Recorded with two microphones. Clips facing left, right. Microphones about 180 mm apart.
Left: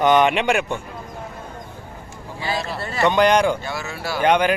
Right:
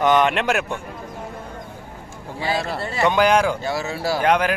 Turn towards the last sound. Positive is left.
turn(degrees=0)  # may be behind; listen again after turning